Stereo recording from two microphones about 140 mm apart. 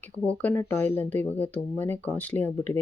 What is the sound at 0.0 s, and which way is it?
Speech, 10° left (ahead or behind).